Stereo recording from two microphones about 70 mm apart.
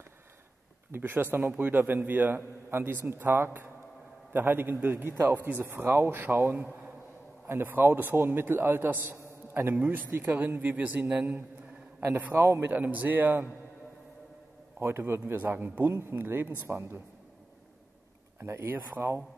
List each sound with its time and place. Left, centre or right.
0.9 s a man's voice: right
7.4 s a man's voice: right
12.4 s a man's voice: right
12.6 s a man's voice: right
14.8 s a man's voice: right
18.4 s a man's voice: right